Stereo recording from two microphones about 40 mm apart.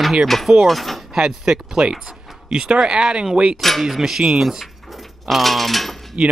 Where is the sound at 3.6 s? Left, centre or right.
Centre.